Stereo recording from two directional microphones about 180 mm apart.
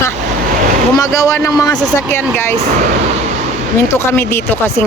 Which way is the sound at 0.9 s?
20° left (ahead or behind).